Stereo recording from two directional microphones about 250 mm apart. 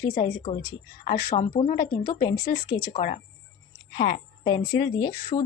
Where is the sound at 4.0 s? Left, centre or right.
Left.